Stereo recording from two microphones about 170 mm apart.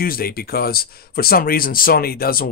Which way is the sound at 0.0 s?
60° left (ahead or behind).